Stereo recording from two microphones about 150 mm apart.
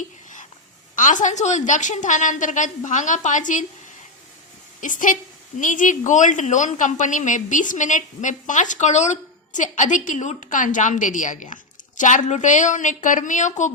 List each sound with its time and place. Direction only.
0.9 s speech: 60° left (ahead or behind)
4.8 s speech: 60° left (ahead or behind)